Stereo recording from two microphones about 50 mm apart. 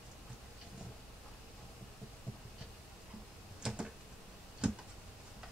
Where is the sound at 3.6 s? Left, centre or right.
Centre.